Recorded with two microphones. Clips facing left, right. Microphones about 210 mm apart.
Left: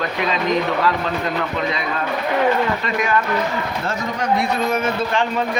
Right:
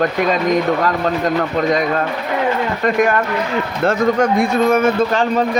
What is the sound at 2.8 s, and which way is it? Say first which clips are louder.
A man's voice: right 5 dB; 50° right (ahead or behind).